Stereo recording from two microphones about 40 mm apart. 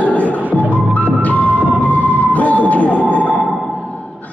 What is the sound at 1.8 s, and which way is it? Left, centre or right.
Music, left.